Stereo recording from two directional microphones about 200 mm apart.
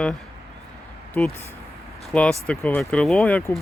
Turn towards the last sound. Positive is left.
turn(degrees=5)  # may be behind; listen again after turning